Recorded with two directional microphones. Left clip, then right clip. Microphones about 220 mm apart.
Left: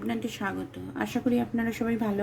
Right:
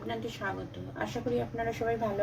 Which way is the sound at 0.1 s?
55° left (ahead or behind).